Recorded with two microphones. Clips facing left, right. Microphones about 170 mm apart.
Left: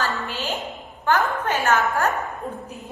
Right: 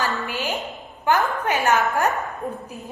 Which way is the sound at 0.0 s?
15° right (ahead or behind).